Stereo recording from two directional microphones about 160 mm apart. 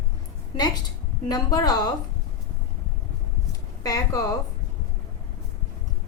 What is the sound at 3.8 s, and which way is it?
Speech, 20° left (ahead or behind).